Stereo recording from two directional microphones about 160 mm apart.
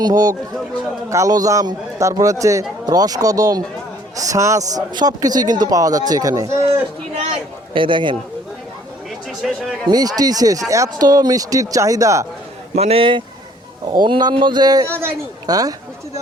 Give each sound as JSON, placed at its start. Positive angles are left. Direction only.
{"t": 0.0, "sound": "a man's voice", "side_deg": -20}
{"t": 7.7, "sound": "a man's voice", "side_deg": -30}
{"t": 9.4, "sound": "speech", "side_deg": 0}
{"t": 9.9, "sound": "a man's voice", "side_deg": -25}
{"t": 12.7, "sound": "a man's voice", "side_deg": -40}